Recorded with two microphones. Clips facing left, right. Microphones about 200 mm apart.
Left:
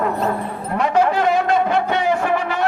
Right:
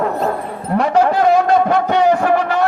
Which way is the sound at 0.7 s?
40° right (ahead or behind).